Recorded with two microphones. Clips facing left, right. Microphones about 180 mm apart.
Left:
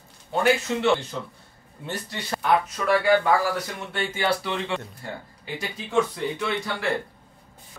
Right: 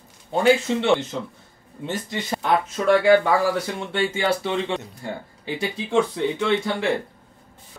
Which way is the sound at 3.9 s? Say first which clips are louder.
Right 3 dB; 25° right (ahead or behind).